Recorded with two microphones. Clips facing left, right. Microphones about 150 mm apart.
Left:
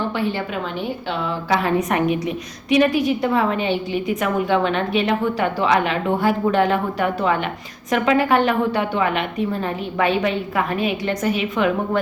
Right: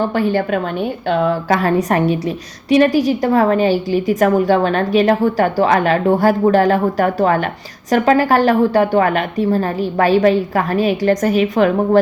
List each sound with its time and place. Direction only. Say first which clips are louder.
0.2 s a woman's voice: right 7 dB; 45° right (ahead or behind)